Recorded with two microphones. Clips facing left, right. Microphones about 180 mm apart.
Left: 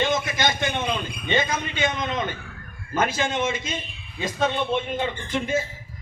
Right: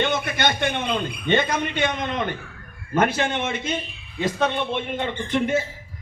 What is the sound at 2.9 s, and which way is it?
A man's voice, 65° right (ahead or behind).